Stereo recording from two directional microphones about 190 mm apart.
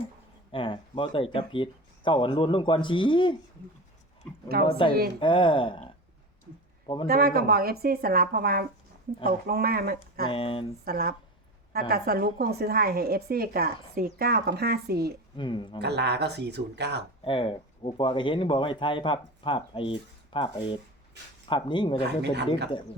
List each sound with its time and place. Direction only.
0.5 s speech: 25° left (ahead or behind)
4.6 s speech: 25° left (ahead or behind)
6.8 s speech: 25° left (ahead or behind)
7.1 s a woman's voice: 50° right (ahead or behind)
10.2 s speech: 30° left (ahead or behind)
10.8 s a woman's voice: 50° right (ahead or behind)
15.4 s speech: 25° left (ahead or behind)
15.8 s speech: 60° right (ahead or behind)
17.2 s speech: 25° left (ahead or behind)